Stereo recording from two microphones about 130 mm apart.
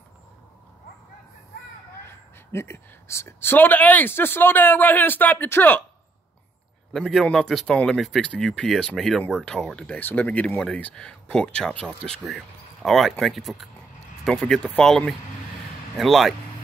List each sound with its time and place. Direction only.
2.0 s speech: 20° left (ahead or behind)
6.9 s speech: 5° left (ahead or behind)